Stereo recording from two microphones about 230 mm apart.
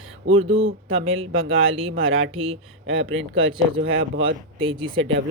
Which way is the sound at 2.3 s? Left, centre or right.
Right.